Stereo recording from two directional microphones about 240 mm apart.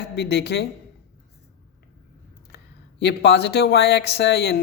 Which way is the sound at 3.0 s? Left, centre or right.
Left.